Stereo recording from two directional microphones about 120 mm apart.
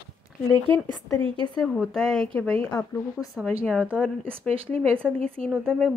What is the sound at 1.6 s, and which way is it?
Speech, 5° left (ahead or behind).